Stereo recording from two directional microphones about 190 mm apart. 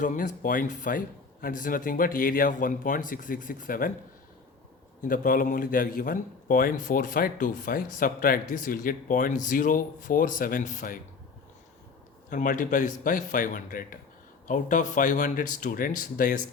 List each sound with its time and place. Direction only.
0.0 s speech: 40° left (ahead or behind)
4.9 s speech: 45° left (ahead or behind)
12.3 s speech: 45° left (ahead or behind)